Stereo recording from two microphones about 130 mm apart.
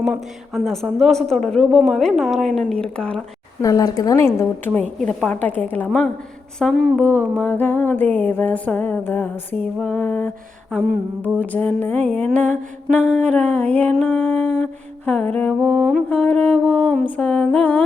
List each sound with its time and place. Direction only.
0.0 s a man's voice: centre (ahead or behind)
2.6 s music: 5° left (ahead or behind)
3.6 s a woman's voice: 25° left (ahead or behind)
4.9 s music: 5° left (ahead or behind)
7.0 s a sound: 15° right (ahead or behind)
7.3 s music: 15° left (ahead or behind)
15.6 s a man's voice: centre (ahead or behind)
16.0 s music: 10° left (ahead or behind)